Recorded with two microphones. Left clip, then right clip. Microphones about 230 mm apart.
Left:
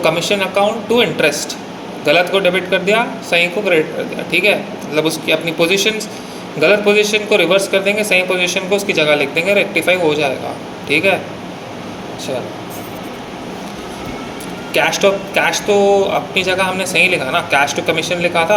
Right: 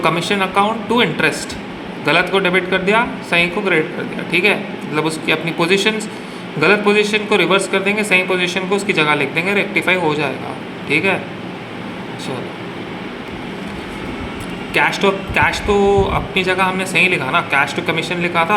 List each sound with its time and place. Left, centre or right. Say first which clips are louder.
0.0 s speech: left 2 dB; centre
14.7 s speech: left 2 dB; centre